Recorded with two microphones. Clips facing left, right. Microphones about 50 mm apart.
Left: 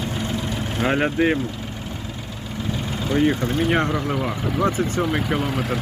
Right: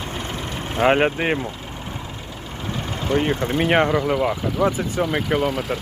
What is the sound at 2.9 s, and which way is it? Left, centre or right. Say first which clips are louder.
Vehicle: even; right.